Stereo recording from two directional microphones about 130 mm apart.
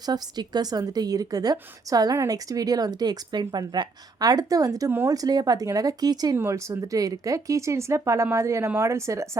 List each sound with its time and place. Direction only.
0.0 s a woman's voice: 30° right (ahead or behind)
4.9 s speech: 15° right (ahead or behind)
5.1 s a woman's voice: 30° right (ahead or behind)